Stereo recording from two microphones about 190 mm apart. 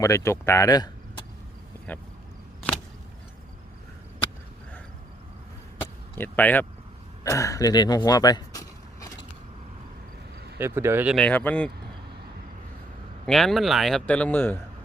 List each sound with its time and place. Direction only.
0.0 s speech: 15° left (ahead or behind)
1.9 s speech: 10° left (ahead or behind)
5.8 s a sound: 10° left (ahead or behind)
7.3 s speech: 15° left (ahead or behind)
10.6 s speech: 10° right (ahead or behind)
11.1 s speech: 5° left (ahead or behind)
13.2 s a man's voice: centre (ahead or behind)